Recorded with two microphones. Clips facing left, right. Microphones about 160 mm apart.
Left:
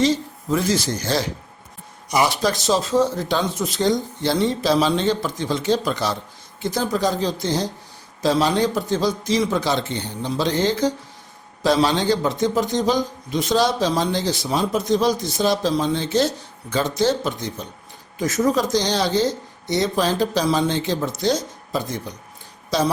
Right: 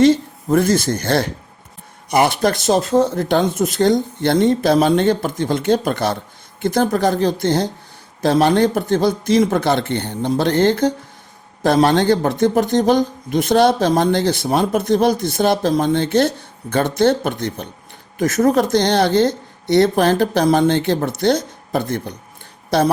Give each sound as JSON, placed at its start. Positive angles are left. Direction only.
{"t": 0.0, "sound": "a man's voice", "side_deg": -55}